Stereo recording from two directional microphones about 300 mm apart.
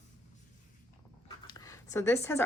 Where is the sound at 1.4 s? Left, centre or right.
Centre.